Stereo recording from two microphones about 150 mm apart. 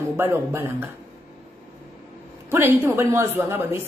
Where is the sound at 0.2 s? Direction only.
15° right (ahead or behind).